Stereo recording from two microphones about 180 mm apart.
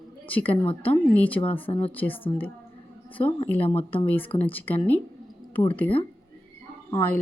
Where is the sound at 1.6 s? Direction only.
30° left (ahead or behind).